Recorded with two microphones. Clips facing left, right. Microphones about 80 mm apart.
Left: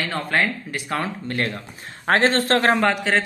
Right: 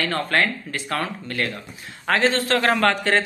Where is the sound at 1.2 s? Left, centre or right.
Left.